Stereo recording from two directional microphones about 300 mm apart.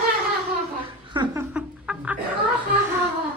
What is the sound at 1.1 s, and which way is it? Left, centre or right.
Music, centre.